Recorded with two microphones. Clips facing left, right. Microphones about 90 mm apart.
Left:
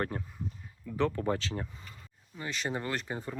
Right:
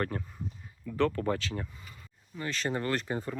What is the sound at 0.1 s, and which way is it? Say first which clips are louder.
Speech: right 1 dB; 20° left (ahead or behind).